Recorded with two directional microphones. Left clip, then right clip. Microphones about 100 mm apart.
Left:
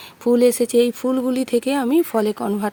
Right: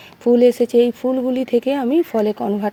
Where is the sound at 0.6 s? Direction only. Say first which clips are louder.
Right 2 dB; 55° left (ahead or behind); by 2.2 s 40° left (ahead or behind).